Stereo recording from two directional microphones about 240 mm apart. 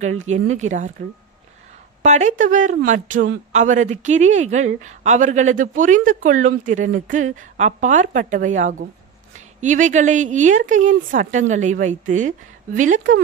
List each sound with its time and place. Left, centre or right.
0.0 s speech: right
2.0 s a woman's voice: right